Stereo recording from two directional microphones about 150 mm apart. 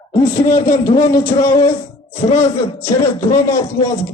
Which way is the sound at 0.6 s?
20° left (ahead or behind).